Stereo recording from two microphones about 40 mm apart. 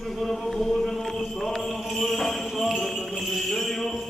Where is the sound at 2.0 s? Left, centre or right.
Centre.